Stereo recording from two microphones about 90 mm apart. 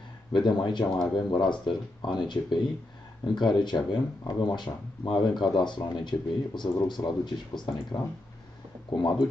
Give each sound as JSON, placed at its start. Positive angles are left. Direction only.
{"t": 0.3, "sound": "speech", "side_deg": 60}